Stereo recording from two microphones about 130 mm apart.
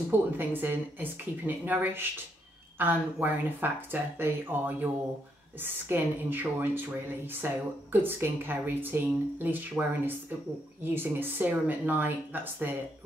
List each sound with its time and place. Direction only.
0.1 s speech: 15° right (ahead or behind)